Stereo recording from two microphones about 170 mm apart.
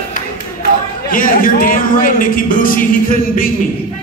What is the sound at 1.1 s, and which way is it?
Speech, 55° left (ahead or behind).